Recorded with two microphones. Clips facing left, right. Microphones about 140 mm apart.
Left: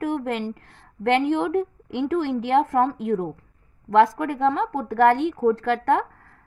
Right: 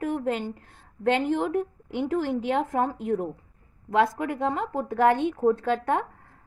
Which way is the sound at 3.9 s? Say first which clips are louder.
Left 5 dB; 75° left (ahead or behind).